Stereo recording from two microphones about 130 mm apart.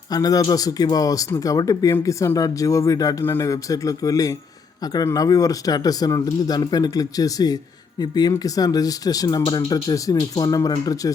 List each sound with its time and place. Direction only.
0.1 s speech: 30° left (ahead or behind)